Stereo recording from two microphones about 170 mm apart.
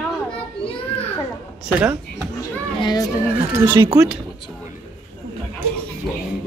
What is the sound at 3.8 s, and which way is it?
Speech, 20° right (ahead or behind).